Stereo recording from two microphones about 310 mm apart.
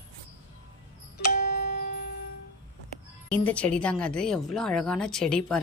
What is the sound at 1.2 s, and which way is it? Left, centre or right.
Music, left.